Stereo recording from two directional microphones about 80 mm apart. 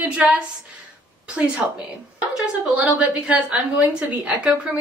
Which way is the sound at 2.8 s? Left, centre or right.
Centre.